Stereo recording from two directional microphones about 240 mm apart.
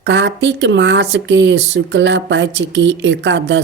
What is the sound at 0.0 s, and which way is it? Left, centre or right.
Speech, right.